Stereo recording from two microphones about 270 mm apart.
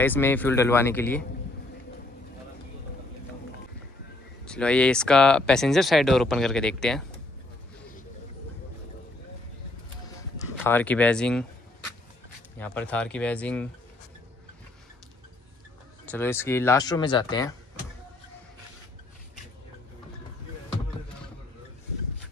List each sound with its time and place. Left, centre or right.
0.0 s speech: centre
4.5 s speech: centre
10.4 s speech: centre
12.5 s speech: centre
16.1 s speech: centre